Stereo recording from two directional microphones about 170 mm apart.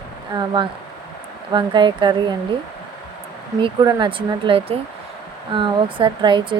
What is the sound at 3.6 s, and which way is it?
Speech, 25° right (ahead or behind).